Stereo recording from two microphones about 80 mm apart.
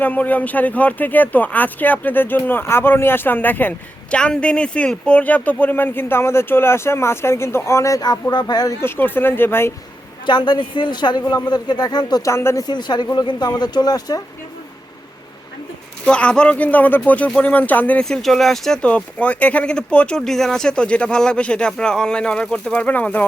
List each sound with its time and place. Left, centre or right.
0.0 s speech: left
4.1 s speech: centre; by 8.0 s left
8.3 s speech: left
8.8 s speech: left
10.2 s speech: left
12.2 s speech: left
12.6 s speech: left
16.0 s speech: centre
18.0 s speech: centre